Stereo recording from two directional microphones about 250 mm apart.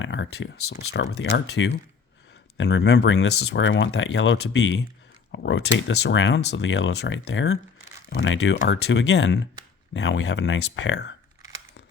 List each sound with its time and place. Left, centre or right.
0.0 s speech: left